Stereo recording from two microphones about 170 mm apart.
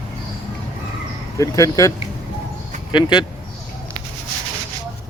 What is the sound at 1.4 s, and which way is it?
Speech, 20° left (ahead or behind).